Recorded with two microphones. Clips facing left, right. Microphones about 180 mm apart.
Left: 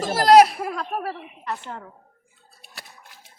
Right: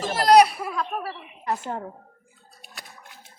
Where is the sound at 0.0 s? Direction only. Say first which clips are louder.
Left 2 dB; 45° left (ahead or behind).